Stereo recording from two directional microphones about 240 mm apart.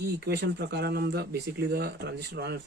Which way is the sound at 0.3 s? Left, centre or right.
Right.